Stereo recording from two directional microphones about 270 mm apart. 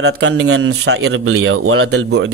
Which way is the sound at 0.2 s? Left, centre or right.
Right.